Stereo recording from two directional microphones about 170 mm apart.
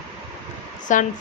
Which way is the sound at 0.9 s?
50° left (ahead or behind).